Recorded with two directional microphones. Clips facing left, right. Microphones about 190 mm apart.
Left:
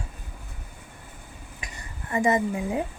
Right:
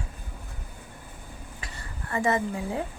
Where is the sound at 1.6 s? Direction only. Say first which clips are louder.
Left 1 dB; 15° left (ahead or behind).